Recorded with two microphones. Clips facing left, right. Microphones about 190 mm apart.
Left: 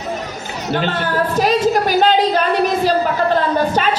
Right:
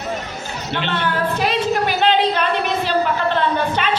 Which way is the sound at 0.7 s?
40° left (ahead or behind).